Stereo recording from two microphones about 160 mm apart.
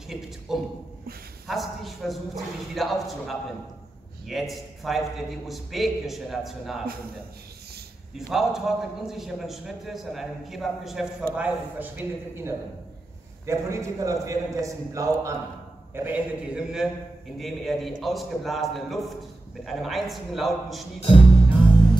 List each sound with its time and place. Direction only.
0.5 s a sound: centre (ahead or behind)
1.5 s a man's voice: centre (ahead or behind)
8.3 s a man's voice: centre (ahead or behind)